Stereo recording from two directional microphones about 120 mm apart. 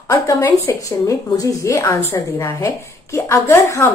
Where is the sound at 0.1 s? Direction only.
30° left (ahead or behind).